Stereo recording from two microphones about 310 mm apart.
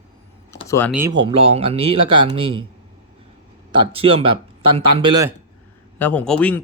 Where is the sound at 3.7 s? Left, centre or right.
Centre.